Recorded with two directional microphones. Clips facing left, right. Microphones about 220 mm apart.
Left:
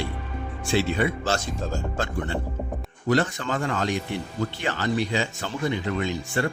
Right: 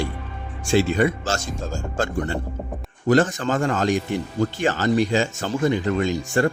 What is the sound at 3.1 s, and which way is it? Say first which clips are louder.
Speech: right 5 dB; 45° right (ahead or behind).